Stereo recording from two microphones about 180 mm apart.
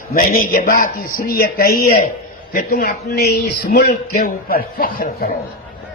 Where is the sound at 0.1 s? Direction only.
50° left (ahead or behind).